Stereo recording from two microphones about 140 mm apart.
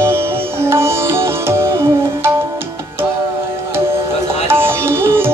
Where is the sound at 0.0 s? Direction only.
20° right (ahead or behind).